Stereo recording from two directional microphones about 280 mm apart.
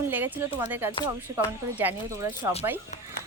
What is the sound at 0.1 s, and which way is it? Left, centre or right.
Speech, centre.